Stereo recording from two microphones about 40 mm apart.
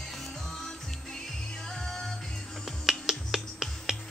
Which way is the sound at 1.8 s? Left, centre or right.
Centre.